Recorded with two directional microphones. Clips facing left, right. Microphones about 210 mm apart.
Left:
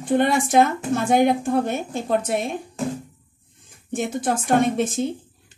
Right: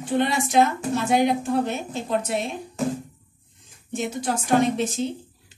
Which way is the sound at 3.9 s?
55° left (ahead or behind).